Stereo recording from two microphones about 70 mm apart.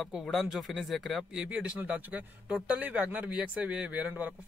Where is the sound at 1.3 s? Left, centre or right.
Centre.